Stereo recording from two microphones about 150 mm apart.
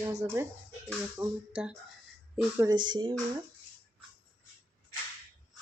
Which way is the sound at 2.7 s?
30° right (ahead or behind).